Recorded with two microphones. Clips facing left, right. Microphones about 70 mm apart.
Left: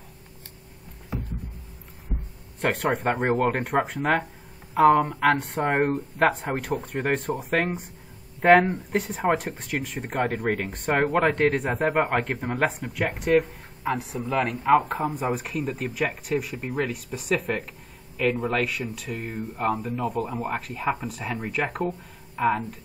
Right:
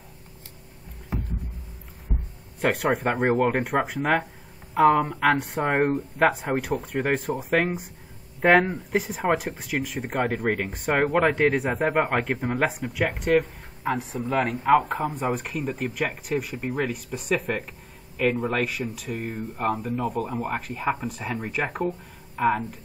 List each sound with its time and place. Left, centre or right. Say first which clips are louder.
2.6 s a man's voice: right 1 dB; centre